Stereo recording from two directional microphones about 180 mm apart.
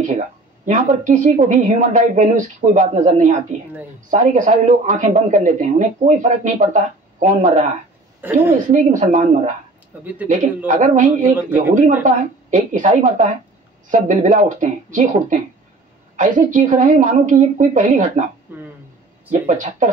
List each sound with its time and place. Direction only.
0.1 s speech: 45° right (ahead or behind)
8.2 s a woman's voice: 10° right (ahead or behind)
8.6 s speech: 45° right (ahead or behind)
19.4 s speech: 45° right (ahead or behind)